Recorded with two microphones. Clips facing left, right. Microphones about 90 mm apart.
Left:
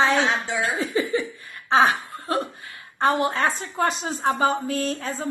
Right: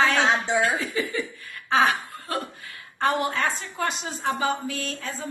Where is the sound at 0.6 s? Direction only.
35° left (ahead or behind).